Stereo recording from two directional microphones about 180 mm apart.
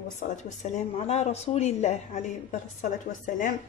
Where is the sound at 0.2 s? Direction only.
40° left (ahead or behind).